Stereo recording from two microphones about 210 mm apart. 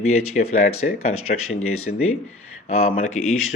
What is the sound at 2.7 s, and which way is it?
Speech, 30° left (ahead or behind).